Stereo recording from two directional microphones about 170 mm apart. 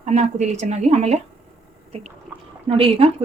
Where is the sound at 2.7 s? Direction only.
35° right (ahead or behind).